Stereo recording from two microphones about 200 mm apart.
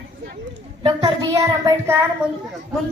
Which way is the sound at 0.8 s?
25° right (ahead or behind).